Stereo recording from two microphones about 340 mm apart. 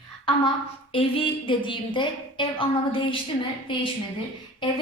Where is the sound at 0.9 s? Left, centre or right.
Centre.